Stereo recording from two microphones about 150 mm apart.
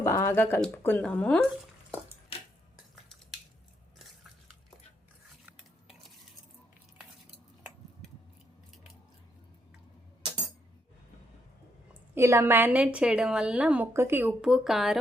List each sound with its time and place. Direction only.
0.0 s speech: 20° left (ahead or behind)
5.5 s stir: 5° right (ahead or behind)
10.2 s cutlery: 25° right (ahead or behind)
12.1 s a woman's voice: 20° right (ahead or behind); by 14.9 s centre (ahead or behind)